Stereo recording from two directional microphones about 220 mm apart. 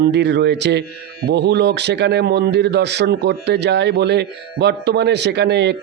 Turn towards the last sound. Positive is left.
turn(degrees=-50)  # may be behind; listen again after turning